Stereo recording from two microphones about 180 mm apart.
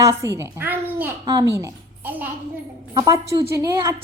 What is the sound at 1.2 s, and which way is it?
A woman's voice, 20° right (ahead or behind).